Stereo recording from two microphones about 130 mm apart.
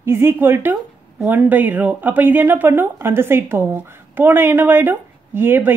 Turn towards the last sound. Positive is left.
turn(degrees=-15)  # may be behind; listen again after turning